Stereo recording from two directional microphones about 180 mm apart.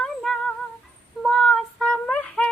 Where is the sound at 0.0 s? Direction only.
Centre (ahead or behind).